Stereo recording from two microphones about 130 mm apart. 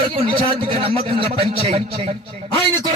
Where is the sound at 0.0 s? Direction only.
40° right (ahead or behind).